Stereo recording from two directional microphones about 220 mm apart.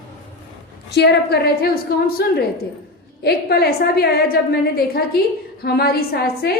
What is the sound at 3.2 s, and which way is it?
A woman's voice, 45° left (ahead or behind).